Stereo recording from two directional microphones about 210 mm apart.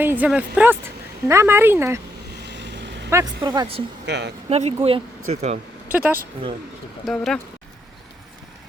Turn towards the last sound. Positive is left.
turn(degrees=0)  # may be behind; listen again after turning